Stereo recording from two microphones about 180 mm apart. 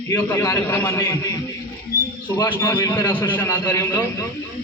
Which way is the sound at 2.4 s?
20° left (ahead or behind).